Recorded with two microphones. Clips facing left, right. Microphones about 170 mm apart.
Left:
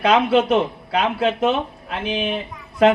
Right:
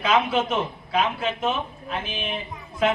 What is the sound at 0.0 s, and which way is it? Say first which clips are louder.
A child's voice: left 6 dB; 65° left (ahead or behind).